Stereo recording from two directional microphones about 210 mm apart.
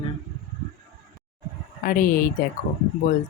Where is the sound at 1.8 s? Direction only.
40° left (ahead or behind).